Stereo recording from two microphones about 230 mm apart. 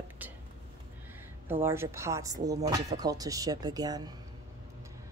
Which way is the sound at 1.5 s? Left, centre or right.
Centre.